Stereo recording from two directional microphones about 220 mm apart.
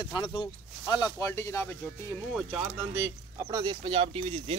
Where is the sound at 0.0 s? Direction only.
20° left (ahead or behind).